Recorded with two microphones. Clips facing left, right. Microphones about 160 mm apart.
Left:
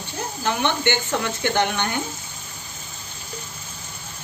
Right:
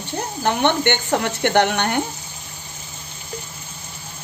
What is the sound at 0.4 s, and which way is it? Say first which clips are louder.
Speech: right 5 dB; 55° right (ahead or behind).